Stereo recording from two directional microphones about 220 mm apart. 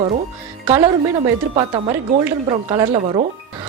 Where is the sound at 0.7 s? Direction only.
20° right (ahead or behind).